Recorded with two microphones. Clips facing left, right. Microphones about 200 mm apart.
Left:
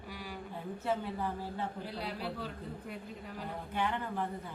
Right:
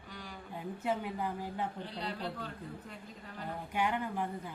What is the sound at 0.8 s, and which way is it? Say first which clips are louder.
Speech: even; 15° right (ahead or behind).